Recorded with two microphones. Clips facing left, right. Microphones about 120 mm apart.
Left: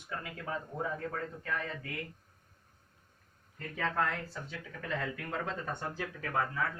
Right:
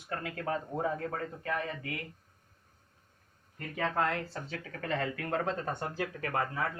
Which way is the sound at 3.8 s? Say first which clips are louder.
Right 2 dB; 20° right (ahead or behind).